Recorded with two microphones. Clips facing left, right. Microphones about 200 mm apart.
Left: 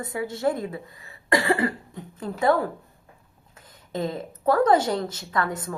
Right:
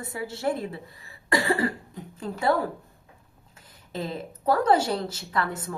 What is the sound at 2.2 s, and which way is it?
Speech, 30° right (ahead or behind).